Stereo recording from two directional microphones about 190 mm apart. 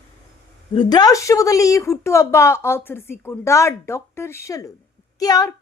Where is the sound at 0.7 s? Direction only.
20° left (ahead or behind).